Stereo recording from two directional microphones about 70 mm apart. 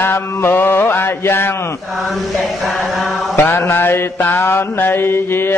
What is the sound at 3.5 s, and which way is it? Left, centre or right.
Mantra, left.